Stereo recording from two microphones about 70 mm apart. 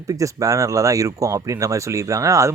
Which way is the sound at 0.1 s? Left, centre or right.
Right.